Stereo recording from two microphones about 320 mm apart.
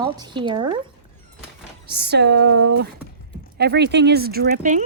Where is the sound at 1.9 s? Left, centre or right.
Right.